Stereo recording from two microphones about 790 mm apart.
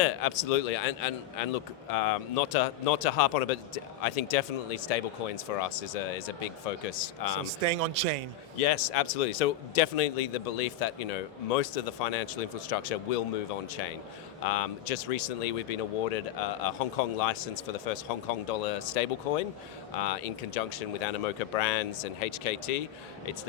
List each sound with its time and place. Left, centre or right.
0.0 s speech: left
7.4 s speech: right
8.5 s speech: left
14.4 s speech: left